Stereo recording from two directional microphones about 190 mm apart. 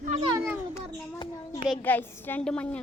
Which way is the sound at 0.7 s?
25° left (ahead or behind).